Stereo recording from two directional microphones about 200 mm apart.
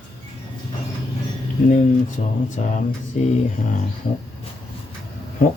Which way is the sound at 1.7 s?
40° left (ahead or behind).